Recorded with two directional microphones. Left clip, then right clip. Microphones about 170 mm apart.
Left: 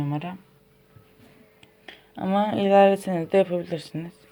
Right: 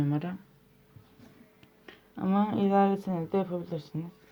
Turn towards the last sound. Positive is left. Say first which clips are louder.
# left 7 dB
turn(degrees=35)  # may be behind; listen again after turning